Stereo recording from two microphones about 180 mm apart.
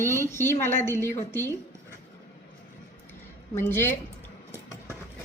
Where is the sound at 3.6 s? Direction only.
10° left (ahead or behind).